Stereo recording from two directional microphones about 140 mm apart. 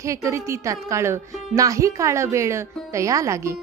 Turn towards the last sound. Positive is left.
turn(degrees=-20)  # may be behind; listen again after turning